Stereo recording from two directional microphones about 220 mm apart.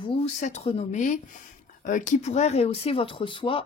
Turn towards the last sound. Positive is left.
turn(degrees=25)  # may be behind; listen again after turning